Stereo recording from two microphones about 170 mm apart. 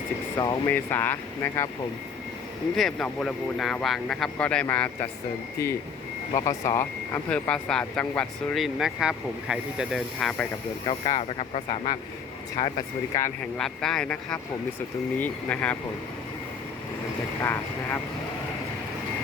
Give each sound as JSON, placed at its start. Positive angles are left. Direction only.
{"t": 0.4, "sound": "speech", "side_deg": 15}
{"t": 2.7, "sound": "speech", "side_deg": 5}
{"t": 6.3, "sound": "speech", "side_deg": 20}
{"t": 10.8, "sound": "speech", "side_deg": 30}
{"t": 12.6, "sound": "speech", "side_deg": 25}
{"t": 13.6, "sound": "speech", "side_deg": 5}
{"t": 17.4, "sound": "speech", "side_deg": 15}